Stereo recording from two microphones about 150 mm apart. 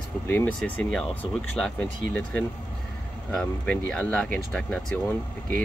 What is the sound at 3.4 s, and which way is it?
Speech, 5° left (ahead or behind).